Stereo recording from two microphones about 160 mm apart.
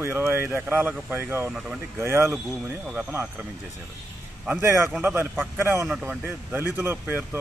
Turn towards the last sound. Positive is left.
turn(degrees=-10)  # may be behind; listen again after turning